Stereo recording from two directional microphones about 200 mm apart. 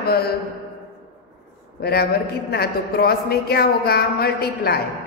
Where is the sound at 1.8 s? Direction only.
50° left (ahead or behind).